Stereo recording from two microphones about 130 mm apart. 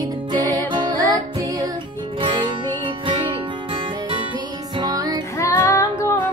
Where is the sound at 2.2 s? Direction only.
40° right (ahead or behind).